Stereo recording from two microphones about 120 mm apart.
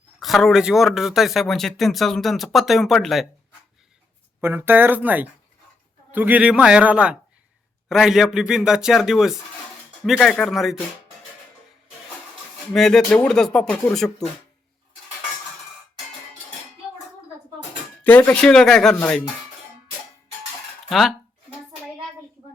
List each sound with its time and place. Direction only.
0.2 s speech: centre (ahead or behind)
4.4 s a man's voice: 20° right (ahead or behind); by 10.8 s centre (ahead or behind)
12.7 s speech: 5° left (ahead or behind)
18.0 s speech: 15° left (ahead or behind)